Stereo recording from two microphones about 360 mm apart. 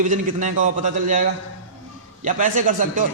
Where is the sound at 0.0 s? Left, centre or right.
Right.